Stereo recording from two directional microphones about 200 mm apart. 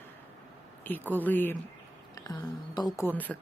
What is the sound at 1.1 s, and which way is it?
Speech, 10° left (ahead or behind).